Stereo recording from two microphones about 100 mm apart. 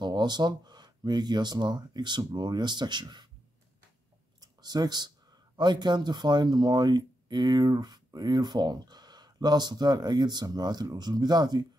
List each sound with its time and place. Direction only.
0.0 s speech: 45° right (ahead or behind)
4.4 s speech: 40° right (ahead or behind)